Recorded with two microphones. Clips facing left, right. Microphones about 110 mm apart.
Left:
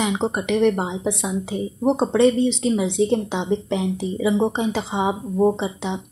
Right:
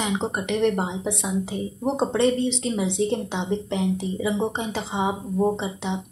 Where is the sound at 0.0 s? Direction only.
15° left (ahead or behind).